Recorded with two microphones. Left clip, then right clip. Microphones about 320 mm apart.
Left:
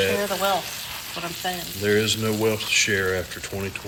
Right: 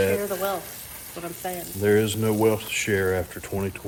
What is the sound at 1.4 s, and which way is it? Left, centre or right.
Speech, centre.